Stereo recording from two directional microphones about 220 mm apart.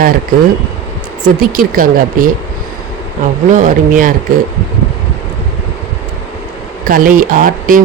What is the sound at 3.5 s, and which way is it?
Speech, 35° right (ahead or behind).